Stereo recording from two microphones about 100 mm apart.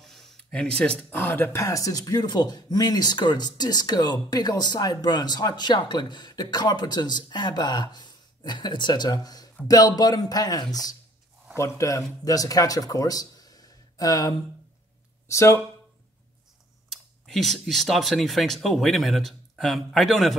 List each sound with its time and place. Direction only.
0.0 s a sound: centre (ahead or behind)
1.3 s speech: 25° left (ahead or behind)
17.3 s speech: 5° left (ahead or behind)